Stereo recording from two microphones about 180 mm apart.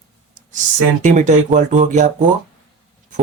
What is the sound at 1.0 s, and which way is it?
Speech, 40° right (ahead or behind).